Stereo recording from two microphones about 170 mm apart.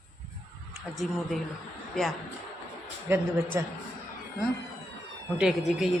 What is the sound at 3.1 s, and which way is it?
Speech, 15° right (ahead or behind).